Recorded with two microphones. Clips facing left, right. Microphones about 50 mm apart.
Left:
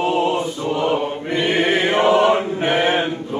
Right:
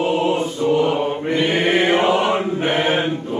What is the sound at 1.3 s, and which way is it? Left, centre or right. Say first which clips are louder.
Choir: left 1 dB; centre.